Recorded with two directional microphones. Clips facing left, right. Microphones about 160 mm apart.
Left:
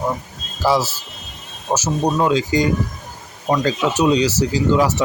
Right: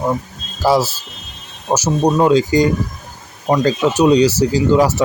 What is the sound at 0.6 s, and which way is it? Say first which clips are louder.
Speech: right 3 dB; 35° right (ahead or behind).